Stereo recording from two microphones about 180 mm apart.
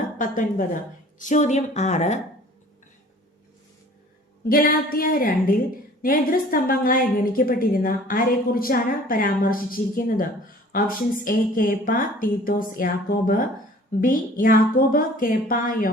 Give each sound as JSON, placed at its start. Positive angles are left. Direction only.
{"t": 0.2, "sound": "a woman's voice", "side_deg": 45}
{"t": 4.4, "sound": "a woman's voice", "side_deg": 55}